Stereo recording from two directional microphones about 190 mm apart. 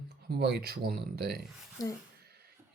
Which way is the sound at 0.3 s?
55° right (ahead or behind).